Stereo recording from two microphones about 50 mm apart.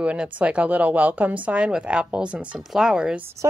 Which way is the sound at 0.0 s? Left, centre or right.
Right.